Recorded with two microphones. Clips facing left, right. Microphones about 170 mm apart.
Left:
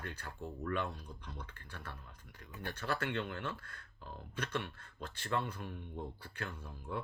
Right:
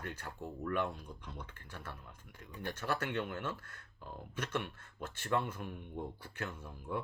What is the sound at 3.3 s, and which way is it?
Speech, 45° right (ahead or behind).